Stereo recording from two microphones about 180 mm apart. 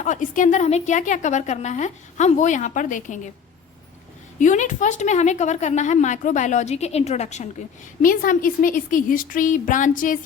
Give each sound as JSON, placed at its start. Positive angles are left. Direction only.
{"t": 0.0, "sound": "a woman's voice", "side_deg": 45}
{"t": 4.4, "sound": "speech", "side_deg": 45}
{"t": 8.0, "sound": "a woman's voice", "side_deg": 50}